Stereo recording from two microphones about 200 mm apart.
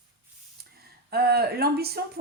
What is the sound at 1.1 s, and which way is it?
Speech, 50° right (ahead or behind).